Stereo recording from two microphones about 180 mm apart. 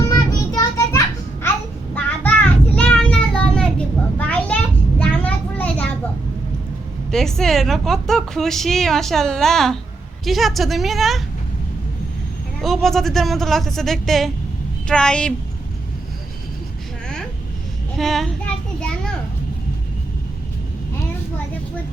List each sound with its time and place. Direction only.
0.5 s children playing: 20° left (ahead or behind)
2.0 s child singing: 5° left (ahead or behind)
4.2 s a sound: 5° left (ahead or behind)
7.1 s a woman's voice: centre (ahead or behind)
12.6 s a woman's voice: centre (ahead or behind)
17.9 s a sound: centre (ahead or behind)